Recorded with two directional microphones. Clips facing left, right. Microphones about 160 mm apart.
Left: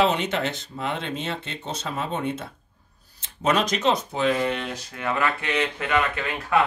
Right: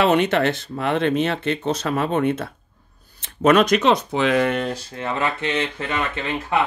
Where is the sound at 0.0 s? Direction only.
60° right (ahead or behind); by 4.5 s 85° right.